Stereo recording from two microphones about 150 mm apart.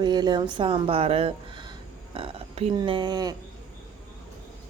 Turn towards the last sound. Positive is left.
turn(degrees=-30)  # may be behind; listen again after turning